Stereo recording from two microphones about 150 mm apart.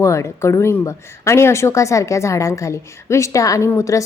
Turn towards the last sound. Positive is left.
turn(degrees=20)  # may be behind; listen again after turning